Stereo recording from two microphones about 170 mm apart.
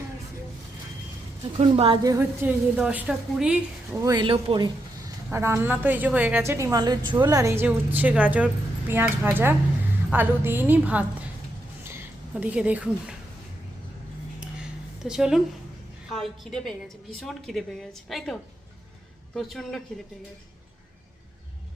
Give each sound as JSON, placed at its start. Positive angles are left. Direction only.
{"t": 1.5, "sound": "speech", "side_deg": -35}
{"t": 2.0, "sound": "a woman's voice", "side_deg": -15}
{"t": 2.7, "sound": "a woman's voice", "side_deg": -5}
{"t": 4.0, "sound": "a woman's voice", "side_deg": -25}
{"t": 11.8, "sound": "a sound", "side_deg": -15}
{"t": 15.0, "sound": "a woman's voice", "side_deg": -5}